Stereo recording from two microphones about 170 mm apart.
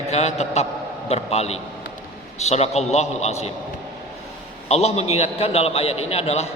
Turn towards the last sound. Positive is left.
turn(degrees=35)  # may be behind; listen again after turning